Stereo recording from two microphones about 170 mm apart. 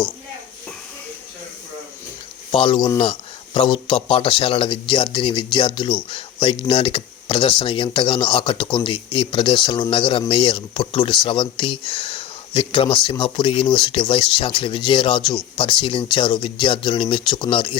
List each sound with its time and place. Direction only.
2.5 s speech: 30° left (ahead or behind)